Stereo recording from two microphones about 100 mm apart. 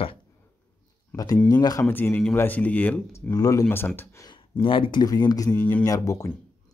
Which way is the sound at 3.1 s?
35° left (ahead or behind).